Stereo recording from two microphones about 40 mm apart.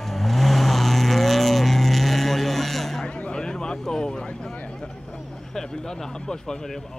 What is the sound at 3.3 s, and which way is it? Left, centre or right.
Vehicle, centre.